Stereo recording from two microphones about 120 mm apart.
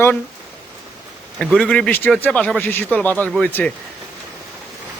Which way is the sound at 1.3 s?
5° left (ahead or behind).